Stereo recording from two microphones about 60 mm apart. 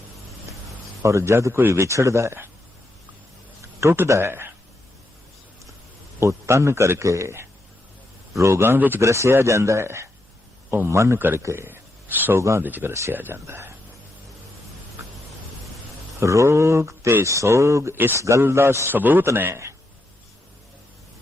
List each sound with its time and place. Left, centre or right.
1.0 s speech: right
3.8 s speech: right
4.2 s speech: right
6.1 s speech: right
10.7 s a man's voice: right
10.9 s speech: right
12.4 s speech: right
12.6 s speech: right
16.2 s speech: right
17.9 s speech: right
18.2 s speech: right
18.9 s speech: right